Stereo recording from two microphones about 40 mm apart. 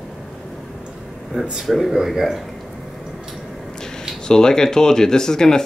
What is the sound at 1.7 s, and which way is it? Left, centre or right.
Speech, centre.